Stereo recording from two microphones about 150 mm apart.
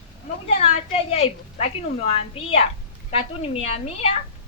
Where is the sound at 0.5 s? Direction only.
45° left (ahead or behind).